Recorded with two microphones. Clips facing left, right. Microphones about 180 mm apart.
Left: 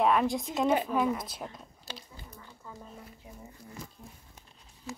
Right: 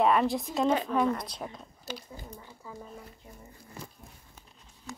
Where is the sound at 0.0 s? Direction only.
Centre (ahead or behind).